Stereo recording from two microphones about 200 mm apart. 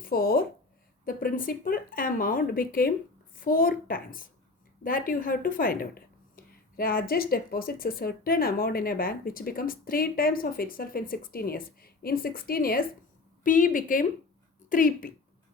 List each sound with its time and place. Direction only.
0.0 s a woman's voice: 45° left (ahead or behind)